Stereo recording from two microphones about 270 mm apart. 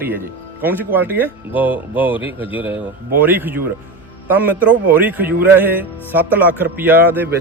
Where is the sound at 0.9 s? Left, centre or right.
Centre.